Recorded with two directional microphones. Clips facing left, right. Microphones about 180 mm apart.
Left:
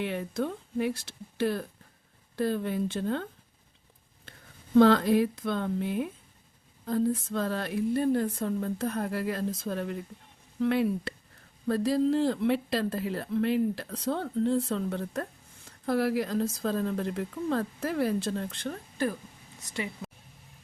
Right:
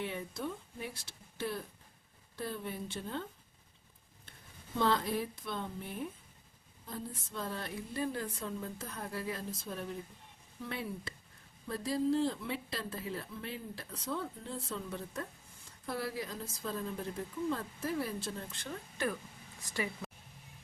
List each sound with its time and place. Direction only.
0.0 s speech: 75° left (ahead or behind)
4.8 s speech: 90° left; by 18.8 s 60° left (ahead or behind)
19.7 s speech: 20° left (ahead or behind)